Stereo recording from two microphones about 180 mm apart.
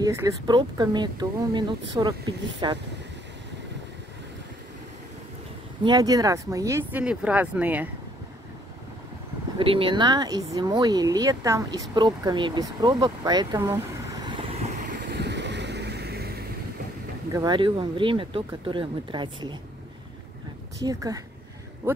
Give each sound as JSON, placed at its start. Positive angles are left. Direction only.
{"t": 0.0, "sound": "speech", "side_deg": -15}
{"t": 5.9, "sound": "speech", "side_deg": -20}
{"t": 9.6, "sound": "speech", "side_deg": -30}
{"t": 15.0, "sound": "vehicle", "side_deg": -70}
{"t": 17.3, "sound": "speech", "side_deg": -20}
{"t": 20.8, "sound": "speech", "side_deg": -20}